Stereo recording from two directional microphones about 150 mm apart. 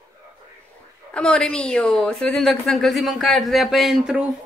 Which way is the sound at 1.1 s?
5° left (ahead or behind).